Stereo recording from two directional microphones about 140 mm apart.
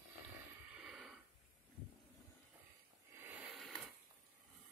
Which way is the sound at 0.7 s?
Centre (ahead or behind).